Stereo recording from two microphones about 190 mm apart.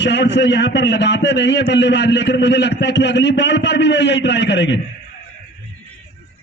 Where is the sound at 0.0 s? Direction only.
70° left (ahead or behind).